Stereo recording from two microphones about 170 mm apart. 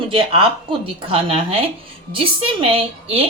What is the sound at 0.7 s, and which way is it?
A woman's voice, 35° right (ahead or behind).